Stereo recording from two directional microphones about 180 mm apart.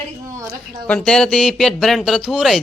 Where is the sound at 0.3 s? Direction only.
15° right (ahead or behind).